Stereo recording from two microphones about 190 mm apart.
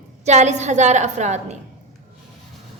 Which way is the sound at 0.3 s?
35° right (ahead or behind).